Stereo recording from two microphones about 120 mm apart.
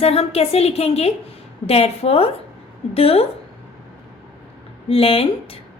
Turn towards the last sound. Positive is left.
turn(degrees=50)  # may be behind; listen again after turning